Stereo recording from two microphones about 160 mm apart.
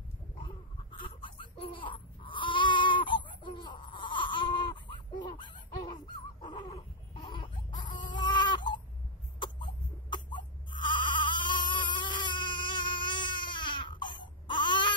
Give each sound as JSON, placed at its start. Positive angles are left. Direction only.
{"t": 0.9, "sound": "baby cry", "side_deg": 30}
{"t": 8.1, "sound": "chicken", "side_deg": 30}
{"t": 9.4, "sound": "cough", "side_deg": 30}
{"t": 10.8, "sound": "bleat", "side_deg": 30}
{"t": 11.2, "sound": "baby cry", "side_deg": 30}